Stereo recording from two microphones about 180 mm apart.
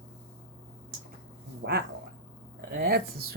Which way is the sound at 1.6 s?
65° right (ahead or behind).